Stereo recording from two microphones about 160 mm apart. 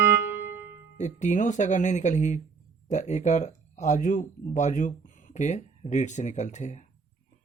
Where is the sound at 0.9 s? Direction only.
50° left (ahead or behind).